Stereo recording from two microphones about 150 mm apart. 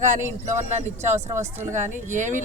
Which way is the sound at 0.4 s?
50° right (ahead or behind).